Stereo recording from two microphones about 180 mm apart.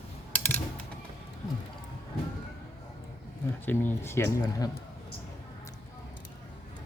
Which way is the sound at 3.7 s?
10° left (ahead or behind).